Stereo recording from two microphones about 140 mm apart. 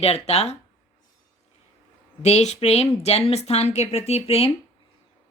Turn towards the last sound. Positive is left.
turn(degrees=45)  # may be behind; listen again after turning